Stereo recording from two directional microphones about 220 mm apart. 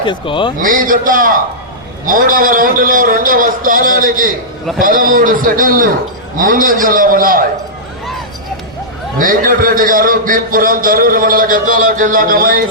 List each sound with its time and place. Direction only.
0.0 s a man's voice: 20° left (ahead or behind)
0.6 s a man's voice: 40° right (ahead or behind)
9.1 s a man's voice: 40° right (ahead or behind)